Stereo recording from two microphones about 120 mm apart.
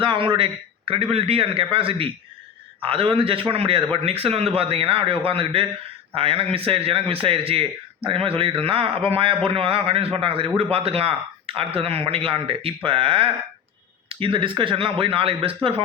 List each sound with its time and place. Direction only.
0.0 s speech: 45° right (ahead or behind)